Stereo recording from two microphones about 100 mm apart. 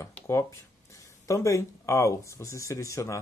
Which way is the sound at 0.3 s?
30° left (ahead or behind).